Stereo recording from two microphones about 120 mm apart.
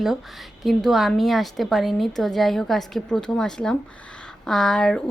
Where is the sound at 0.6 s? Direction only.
Centre (ahead or behind).